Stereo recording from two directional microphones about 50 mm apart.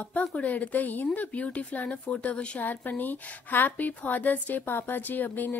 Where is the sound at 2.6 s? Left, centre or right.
Left.